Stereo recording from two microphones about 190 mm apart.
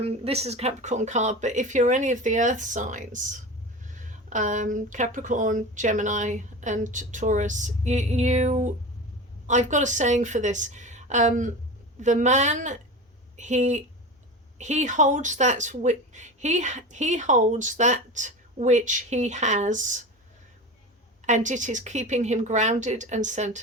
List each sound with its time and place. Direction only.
0.0 s speech: 35° right (ahead or behind)
21.2 s speech: 40° right (ahead or behind)